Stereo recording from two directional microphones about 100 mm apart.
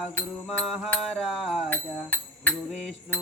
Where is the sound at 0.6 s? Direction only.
Centre (ahead or behind).